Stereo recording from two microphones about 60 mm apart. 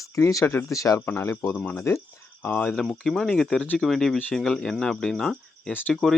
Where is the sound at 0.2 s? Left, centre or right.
Left.